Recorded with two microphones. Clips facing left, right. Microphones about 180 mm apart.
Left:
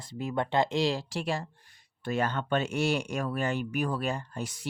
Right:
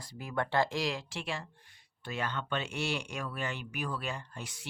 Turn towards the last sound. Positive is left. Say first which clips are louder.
# left 7 dB
turn(degrees=40)  # may be behind; listen again after turning